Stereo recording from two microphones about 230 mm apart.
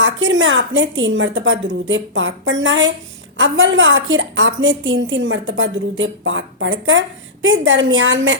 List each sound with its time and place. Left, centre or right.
0.0 s a woman's voice: right